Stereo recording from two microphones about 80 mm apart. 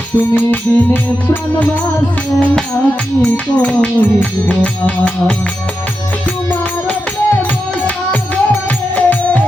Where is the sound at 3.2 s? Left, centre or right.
Centre.